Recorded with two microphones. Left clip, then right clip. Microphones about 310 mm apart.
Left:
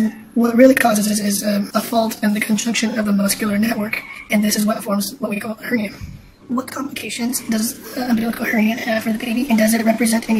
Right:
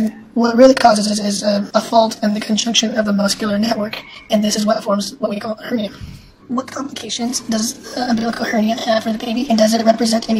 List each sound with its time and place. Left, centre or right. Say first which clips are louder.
0.4 s a woman's voice: right 2 dB; centre
8.9 s speech: right 3 dB; right
9.6 s speech: right 5 dB; centre